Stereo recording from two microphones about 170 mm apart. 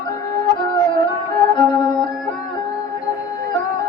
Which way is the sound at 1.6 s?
25° left (ahead or behind).